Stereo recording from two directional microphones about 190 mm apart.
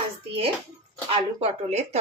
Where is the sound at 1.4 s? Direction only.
35° right (ahead or behind).